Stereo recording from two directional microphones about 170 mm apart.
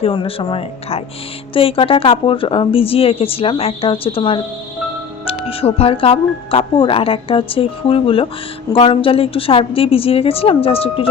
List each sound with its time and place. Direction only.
0.0 s speech: 30° left (ahead or behind)